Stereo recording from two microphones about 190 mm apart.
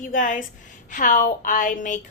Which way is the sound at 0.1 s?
40° left (ahead or behind).